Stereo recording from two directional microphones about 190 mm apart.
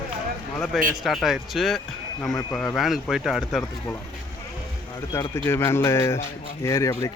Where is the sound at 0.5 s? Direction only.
5° left (ahead or behind).